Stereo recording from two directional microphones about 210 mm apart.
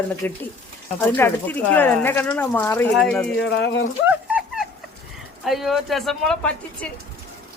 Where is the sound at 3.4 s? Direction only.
55° left (ahead or behind).